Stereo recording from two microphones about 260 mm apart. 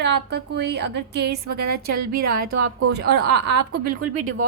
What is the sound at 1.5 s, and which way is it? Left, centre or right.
Speech, right.